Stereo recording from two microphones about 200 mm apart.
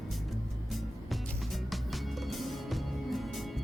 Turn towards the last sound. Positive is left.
turn(degrees=0)  # may be behind; listen again after turning